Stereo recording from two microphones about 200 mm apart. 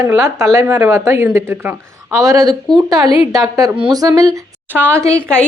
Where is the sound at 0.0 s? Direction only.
15° right (ahead or behind).